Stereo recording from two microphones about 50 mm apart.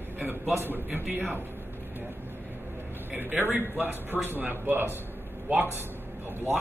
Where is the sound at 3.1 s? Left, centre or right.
Right.